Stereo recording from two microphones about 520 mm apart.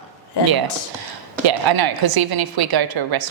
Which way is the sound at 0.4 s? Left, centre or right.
Left.